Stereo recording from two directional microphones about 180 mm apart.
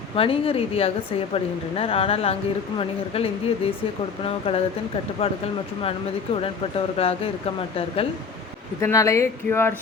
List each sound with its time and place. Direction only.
0.2 s a woman's voice: 30° left (ahead or behind)
6.4 s a woman's voice: 35° left (ahead or behind)
8.8 s speech: 15° left (ahead or behind)